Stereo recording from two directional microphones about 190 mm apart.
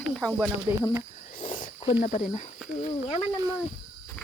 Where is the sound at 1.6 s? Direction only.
30° left (ahead or behind).